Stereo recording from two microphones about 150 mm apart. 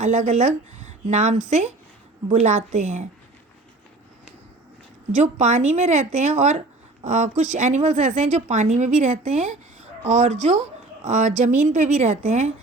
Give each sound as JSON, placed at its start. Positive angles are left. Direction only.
{"t": 0.0, "sound": "a woman's voice", "side_deg": -50}
{"t": 5.1, "sound": "a woman's voice", "side_deg": -50}